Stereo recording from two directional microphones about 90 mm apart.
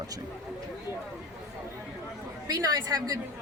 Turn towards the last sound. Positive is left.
turn(degrees=-45)  # may be behind; listen again after turning